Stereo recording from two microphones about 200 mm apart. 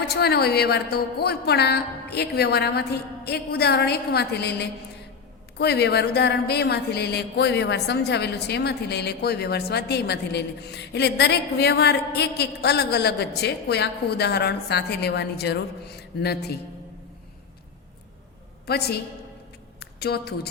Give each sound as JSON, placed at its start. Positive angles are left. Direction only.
{"t": 0.1, "sound": "a woman's voice", "side_deg": 55}
{"t": 18.6, "sound": "a woman's voice", "side_deg": 55}